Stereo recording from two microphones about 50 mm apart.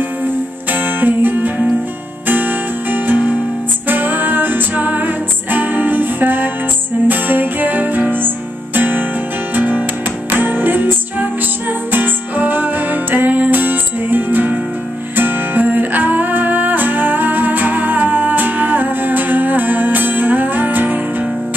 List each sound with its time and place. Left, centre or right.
0.7 s music: right